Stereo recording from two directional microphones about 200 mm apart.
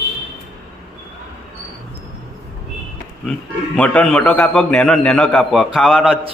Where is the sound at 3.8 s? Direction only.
5° left (ahead or behind).